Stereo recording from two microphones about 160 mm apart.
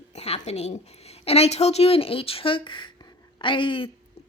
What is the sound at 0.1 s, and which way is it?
A woman's voice, 45° left (ahead or behind).